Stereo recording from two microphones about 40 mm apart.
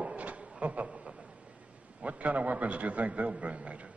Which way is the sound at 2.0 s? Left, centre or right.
Right.